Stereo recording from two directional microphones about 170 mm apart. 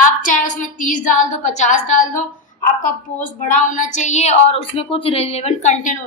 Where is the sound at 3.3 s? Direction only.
50° left (ahead or behind).